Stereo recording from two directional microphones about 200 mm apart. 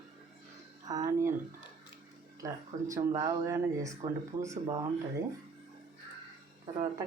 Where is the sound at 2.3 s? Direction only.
15° right (ahead or behind).